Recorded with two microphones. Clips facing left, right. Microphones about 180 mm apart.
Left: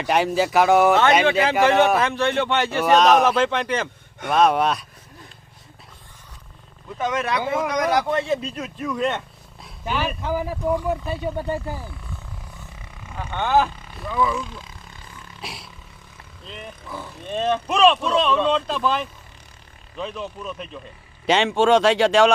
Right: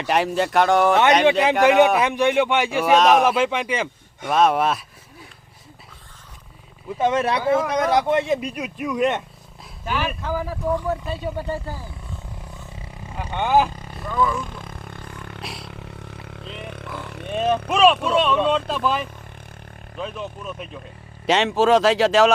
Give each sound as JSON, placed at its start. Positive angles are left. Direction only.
{"t": 0.0, "sound": "speech", "side_deg": 0}
{"t": 2.0, "sound": "speech", "side_deg": -15}
{"t": 7.0, "sound": "speech", "side_deg": -30}
{"t": 7.4, "sound": "speech", "side_deg": 20}
{"t": 7.7, "sound": "speech", "side_deg": -25}
{"t": 10.2, "sound": "speech", "side_deg": 15}
{"t": 13.3, "sound": "speech", "side_deg": -10}
{"t": 13.7, "sound": "vehicle", "side_deg": -40}
{"t": 14.1, "sound": "speech", "side_deg": 10}
{"t": 14.4, "sound": "roar", "side_deg": -55}
{"t": 15.4, "sound": "roar", "side_deg": 0}
{"t": 15.6, "sound": "roar", "side_deg": -65}
{"t": 16.6, "sound": "speech", "side_deg": -70}
{"t": 17.3, "sound": "speech", "side_deg": -10}